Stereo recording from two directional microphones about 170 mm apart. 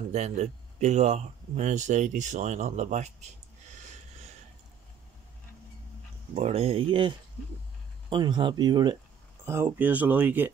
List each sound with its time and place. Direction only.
0.1 s speech: 40° right (ahead or behind)
3.8 s a sound: 40° right (ahead or behind)
6.3 s speech: 35° right (ahead or behind)
9.5 s speech: 15° right (ahead or behind)